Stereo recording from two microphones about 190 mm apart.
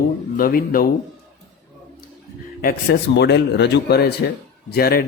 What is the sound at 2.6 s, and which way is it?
A man's voice, 60° left (ahead or behind).